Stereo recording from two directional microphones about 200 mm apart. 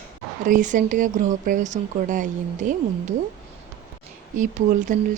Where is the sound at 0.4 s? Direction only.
40° right (ahead or behind).